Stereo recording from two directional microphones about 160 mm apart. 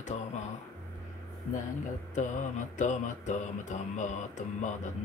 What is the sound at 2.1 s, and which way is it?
Mantra, 50° left (ahead or behind).